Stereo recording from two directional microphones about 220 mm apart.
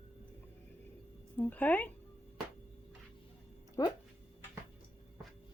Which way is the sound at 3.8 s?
15° left (ahead or behind).